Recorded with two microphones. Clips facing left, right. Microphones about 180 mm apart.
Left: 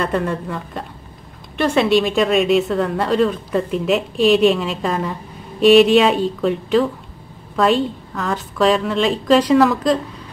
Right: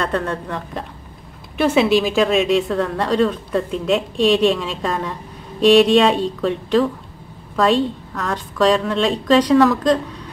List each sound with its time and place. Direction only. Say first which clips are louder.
0.0 s speech: left 1 dB; 5° left (ahead or behind)